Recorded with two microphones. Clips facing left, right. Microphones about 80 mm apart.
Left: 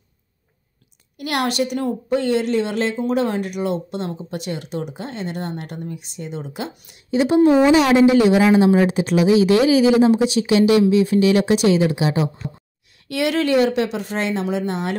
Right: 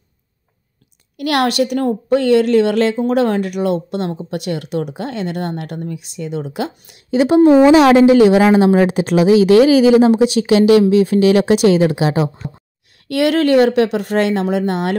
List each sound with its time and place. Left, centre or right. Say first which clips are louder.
1.1 s speech: right 6 dB; right
13.1 s speech: right 5 dB; right